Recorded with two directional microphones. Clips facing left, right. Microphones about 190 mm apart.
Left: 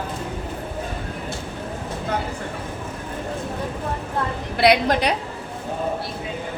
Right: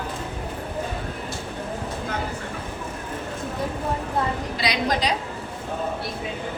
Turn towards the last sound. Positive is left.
turn(degrees=60)  # may be behind; listen again after turning